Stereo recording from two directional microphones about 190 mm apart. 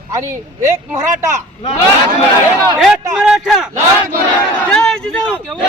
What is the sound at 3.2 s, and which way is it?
A man's voice, centre (ahead or behind).